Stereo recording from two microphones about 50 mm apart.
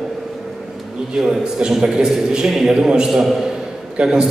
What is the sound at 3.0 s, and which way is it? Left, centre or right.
Speech, centre.